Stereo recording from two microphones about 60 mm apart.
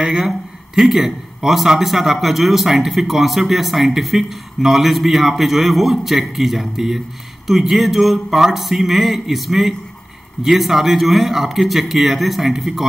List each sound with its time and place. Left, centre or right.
0.0 s a man's voice: centre